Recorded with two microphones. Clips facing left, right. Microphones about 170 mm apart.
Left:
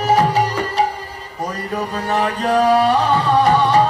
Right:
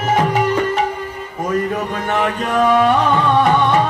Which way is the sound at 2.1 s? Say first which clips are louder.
Left 2 dB; 35° left (ahead or behind).